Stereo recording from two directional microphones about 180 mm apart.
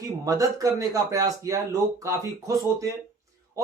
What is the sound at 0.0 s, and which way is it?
A man's voice, 20° right (ahead or behind).